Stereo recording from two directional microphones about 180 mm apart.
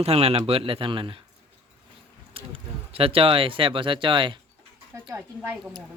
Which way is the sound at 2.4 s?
30° right (ahead or behind).